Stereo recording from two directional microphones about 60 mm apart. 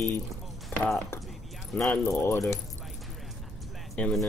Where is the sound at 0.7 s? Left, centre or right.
Left.